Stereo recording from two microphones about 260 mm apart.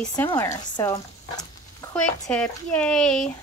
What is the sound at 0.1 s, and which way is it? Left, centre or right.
Speech, centre.